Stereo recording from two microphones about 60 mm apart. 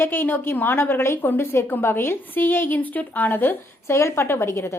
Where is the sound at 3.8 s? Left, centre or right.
Left.